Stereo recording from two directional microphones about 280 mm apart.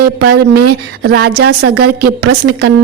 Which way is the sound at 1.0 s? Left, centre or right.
Right.